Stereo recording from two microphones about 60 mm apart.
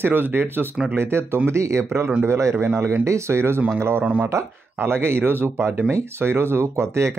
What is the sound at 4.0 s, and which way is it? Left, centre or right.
Speech, right.